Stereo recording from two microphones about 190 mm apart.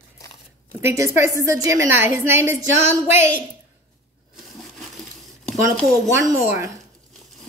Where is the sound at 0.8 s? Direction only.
15° right (ahead or behind).